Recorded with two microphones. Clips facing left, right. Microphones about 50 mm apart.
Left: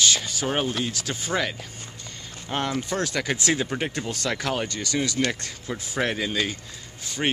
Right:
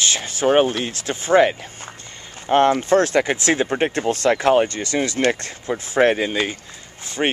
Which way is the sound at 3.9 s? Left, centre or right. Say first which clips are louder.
Right 10 dB; right.